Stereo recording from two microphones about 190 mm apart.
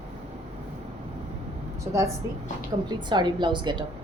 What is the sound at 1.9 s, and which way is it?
Speech, 10° right (ahead or behind).